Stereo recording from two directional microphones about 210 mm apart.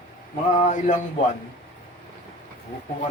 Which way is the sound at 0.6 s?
35° left (ahead or behind).